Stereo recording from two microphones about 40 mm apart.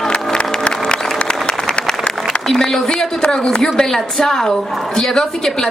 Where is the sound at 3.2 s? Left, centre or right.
Left.